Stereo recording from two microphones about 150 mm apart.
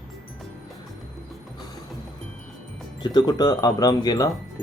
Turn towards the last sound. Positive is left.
turn(degrees=25)  # may be behind; listen again after turning